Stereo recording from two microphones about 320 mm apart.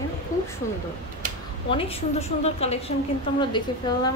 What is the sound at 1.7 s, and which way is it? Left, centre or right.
A woman's voice, centre.